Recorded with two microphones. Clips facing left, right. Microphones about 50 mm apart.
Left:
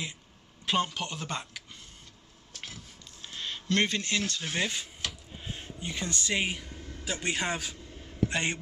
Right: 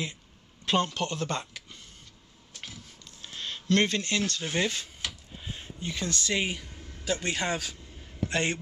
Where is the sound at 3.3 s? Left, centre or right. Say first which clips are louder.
Right 3 dB; centre.